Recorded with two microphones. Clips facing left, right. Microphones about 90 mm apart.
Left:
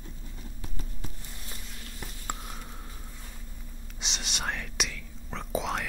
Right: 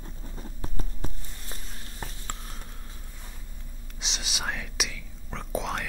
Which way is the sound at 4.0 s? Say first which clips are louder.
Even; centre (ahead or behind).